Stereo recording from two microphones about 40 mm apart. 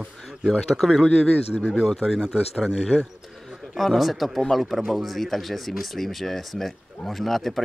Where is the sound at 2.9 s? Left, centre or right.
Right.